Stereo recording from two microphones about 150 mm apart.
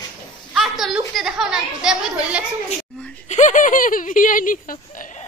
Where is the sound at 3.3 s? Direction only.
55° left (ahead or behind).